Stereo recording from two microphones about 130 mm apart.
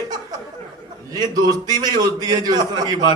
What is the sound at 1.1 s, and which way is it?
A man's voice, 30° right (ahead or behind).